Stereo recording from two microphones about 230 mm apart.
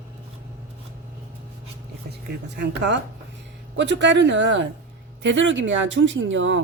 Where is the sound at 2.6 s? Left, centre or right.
Right.